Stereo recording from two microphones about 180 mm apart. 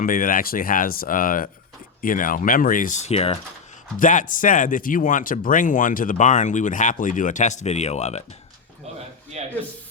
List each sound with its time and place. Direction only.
0.0 s speech: 50° left (ahead or behind); by 3.3 s 35° left (ahead or behind)
3.9 s speech: 45° left (ahead or behind)